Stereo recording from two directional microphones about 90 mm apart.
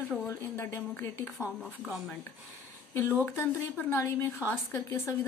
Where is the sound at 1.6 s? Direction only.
5° right (ahead or behind).